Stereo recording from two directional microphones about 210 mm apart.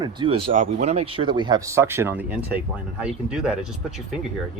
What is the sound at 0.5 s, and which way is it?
Speech, 35° right (ahead or behind).